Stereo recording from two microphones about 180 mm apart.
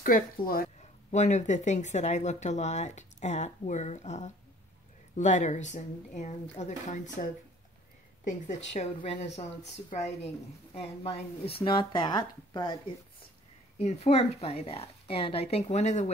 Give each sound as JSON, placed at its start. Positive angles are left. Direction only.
{"t": 0.0, "sound": "speech", "side_deg": 50}
{"t": 13.7, "sound": "speech", "side_deg": 35}